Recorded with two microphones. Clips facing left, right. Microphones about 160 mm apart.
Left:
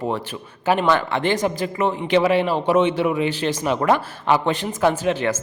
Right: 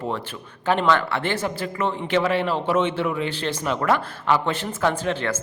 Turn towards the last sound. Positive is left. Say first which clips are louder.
# left 4 dB
turn(degrees=15)  # may be behind; listen again after turning